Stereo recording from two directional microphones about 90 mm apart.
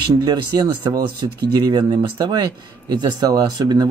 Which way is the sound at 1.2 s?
60° right (ahead or behind).